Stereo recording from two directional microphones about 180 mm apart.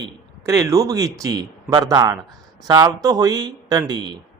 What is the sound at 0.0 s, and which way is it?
A man's voice, 15° right (ahead or behind).